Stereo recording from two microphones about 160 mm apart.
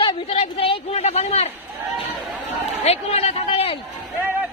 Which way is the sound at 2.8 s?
40° left (ahead or behind).